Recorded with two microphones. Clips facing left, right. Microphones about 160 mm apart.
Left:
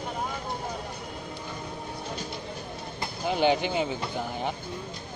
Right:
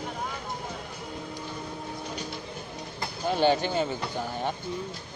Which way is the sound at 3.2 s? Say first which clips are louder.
Even; 15° left (ahead or behind).